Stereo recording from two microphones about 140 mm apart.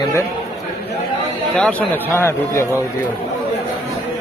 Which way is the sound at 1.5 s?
5° left (ahead or behind).